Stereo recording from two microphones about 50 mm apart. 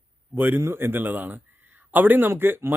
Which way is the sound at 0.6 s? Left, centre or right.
Right.